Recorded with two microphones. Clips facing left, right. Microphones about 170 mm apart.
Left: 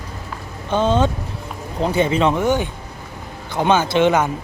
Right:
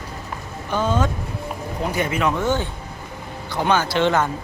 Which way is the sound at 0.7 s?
25° left (ahead or behind).